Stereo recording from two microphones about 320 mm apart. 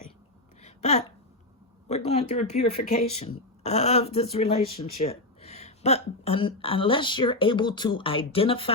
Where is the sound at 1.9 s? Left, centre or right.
Centre.